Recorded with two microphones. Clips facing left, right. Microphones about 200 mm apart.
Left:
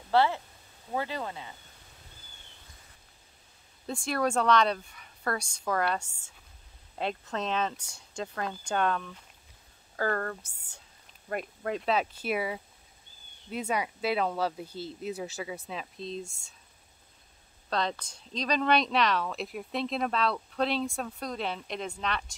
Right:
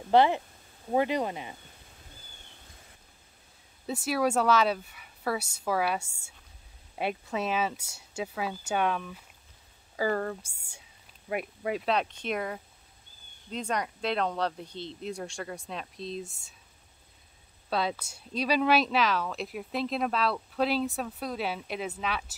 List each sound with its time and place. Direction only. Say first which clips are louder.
0.1 s speech: right 3 dB; 20° right (ahead or behind)
3.8 s speech: right 2 dB; 5° right (ahead or behind)
17.6 s speech: right 1 dB; 5° right (ahead or behind)